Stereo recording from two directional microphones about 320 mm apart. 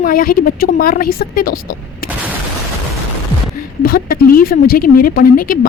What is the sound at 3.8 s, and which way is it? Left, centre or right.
Speech, left.